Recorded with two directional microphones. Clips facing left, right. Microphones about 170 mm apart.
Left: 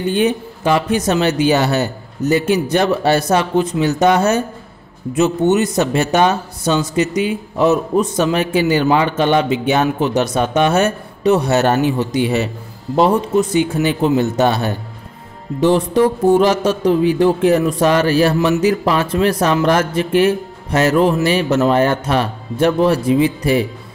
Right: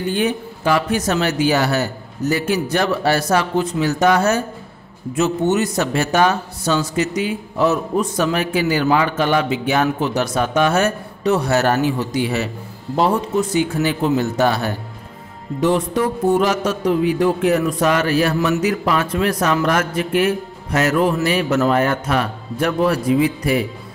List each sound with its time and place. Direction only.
0.1 s a man's voice: 20° left (ahead or behind)